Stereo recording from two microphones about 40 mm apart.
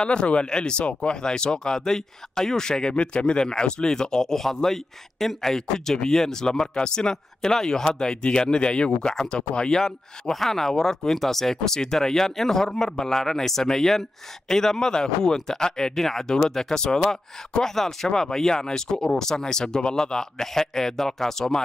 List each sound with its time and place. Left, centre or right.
0.0 s speech: left